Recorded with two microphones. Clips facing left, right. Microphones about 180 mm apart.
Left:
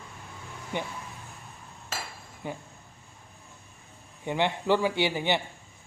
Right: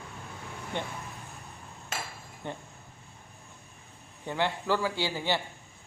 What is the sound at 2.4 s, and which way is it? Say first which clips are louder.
Speech: left 2 dB; 5° left (ahead or behind).